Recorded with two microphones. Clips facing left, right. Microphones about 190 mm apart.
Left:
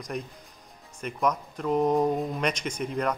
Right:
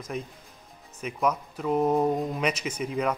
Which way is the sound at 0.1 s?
Centre (ahead or behind).